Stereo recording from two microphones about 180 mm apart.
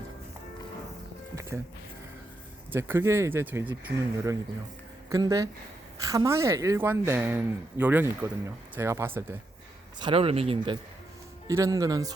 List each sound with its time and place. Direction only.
1.5 s speech: 10° right (ahead or behind)
2.7 s speech: 10° right (ahead or behind)
10.0 s speech: 30° right (ahead or behind)
11.4 s speech: 15° right (ahead or behind)